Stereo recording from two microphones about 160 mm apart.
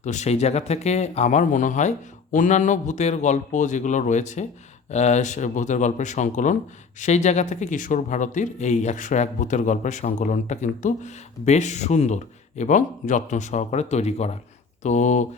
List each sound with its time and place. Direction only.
0.0 s speech: 45° left (ahead or behind)